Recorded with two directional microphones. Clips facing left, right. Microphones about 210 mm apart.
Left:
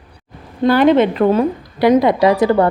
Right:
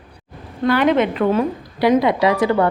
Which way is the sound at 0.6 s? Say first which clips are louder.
Left 4 dB; 35° left (ahead or behind).